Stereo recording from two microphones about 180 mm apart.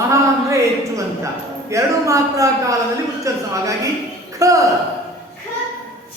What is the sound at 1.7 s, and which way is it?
Speech, 15° right (ahead or behind).